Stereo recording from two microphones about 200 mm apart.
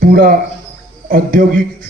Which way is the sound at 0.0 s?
45° right (ahead or behind).